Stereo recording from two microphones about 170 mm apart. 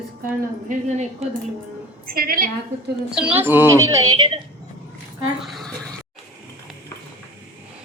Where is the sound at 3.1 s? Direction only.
10° right (ahead or behind); by 4.4 s 25° right (ahead or behind).